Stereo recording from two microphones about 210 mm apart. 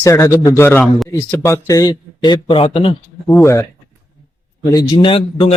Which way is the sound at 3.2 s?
10° left (ahead or behind).